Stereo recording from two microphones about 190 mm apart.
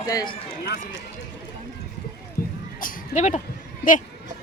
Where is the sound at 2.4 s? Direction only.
50° left (ahead or behind).